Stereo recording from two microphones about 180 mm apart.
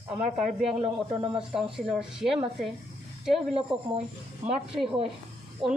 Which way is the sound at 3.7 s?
5° right (ahead or behind).